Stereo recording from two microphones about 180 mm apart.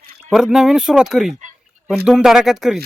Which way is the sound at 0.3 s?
5° right (ahead or behind).